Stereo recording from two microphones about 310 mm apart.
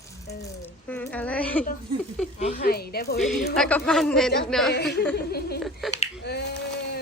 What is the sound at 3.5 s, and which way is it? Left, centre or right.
Speech, centre.